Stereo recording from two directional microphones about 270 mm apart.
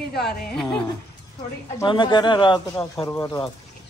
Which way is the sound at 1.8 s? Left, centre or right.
Centre.